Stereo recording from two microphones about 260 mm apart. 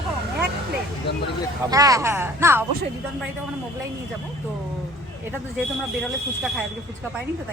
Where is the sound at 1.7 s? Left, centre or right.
Centre.